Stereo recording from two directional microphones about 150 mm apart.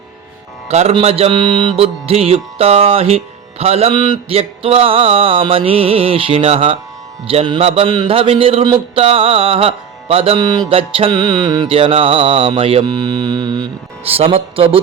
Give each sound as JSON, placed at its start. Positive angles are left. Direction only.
{"t": 0.7, "sound": "mantra", "side_deg": -45}
{"t": 10.4, "sound": "music", "side_deg": -25}
{"t": 10.7, "sound": "mantra", "side_deg": -40}
{"t": 11.1, "sound": "music", "side_deg": -25}
{"t": 11.7, "sound": "mantra", "side_deg": -40}
{"t": 12.8, "sound": "mantra", "side_deg": -25}
{"t": 14.1, "sound": "mantra", "side_deg": -40}